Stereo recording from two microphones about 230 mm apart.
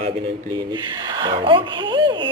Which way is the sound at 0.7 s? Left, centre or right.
Centre.